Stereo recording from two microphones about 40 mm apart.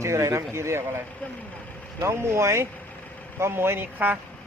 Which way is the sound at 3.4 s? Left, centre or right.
Right.